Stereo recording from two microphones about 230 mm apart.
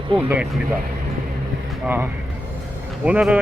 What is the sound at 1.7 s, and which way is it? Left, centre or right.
Speech, centre.